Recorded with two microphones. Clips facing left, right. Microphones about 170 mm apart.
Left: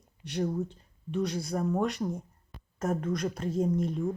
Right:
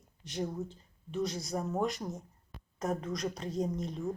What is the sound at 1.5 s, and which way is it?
Speech, centre (ahead or behind).